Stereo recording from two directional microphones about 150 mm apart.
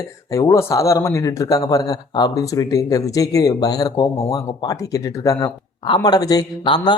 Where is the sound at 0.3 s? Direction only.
20° left (ahead or behind).